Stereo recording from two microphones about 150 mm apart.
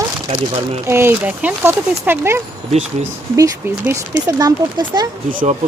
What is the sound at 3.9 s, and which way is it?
A woman's voice, 20° right (ahead or behind).